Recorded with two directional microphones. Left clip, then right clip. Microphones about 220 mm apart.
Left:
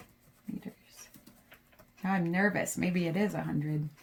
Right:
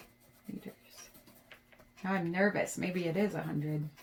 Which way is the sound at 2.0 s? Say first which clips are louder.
Left 1 dB; 55° left (ahead or behind).